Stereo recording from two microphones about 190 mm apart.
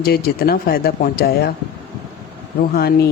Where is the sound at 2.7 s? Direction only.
55° left (ahead or behind).